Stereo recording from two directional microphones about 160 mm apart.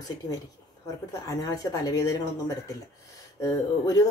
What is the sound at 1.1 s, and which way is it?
Speech, 20° left (ahead or behind).